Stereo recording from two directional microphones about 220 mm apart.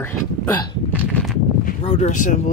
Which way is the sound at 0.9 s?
Centre (ahead or behind).